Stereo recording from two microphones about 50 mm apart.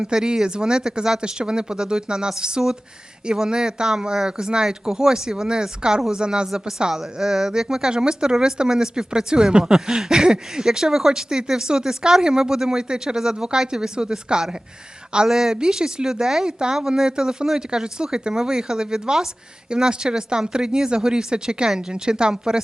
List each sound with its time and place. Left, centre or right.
0.0 s speech: centre